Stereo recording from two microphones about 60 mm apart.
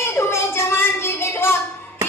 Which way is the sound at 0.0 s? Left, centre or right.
Left.